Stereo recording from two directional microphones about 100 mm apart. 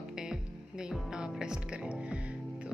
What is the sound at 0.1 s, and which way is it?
Music, 5° right (ahead or behind).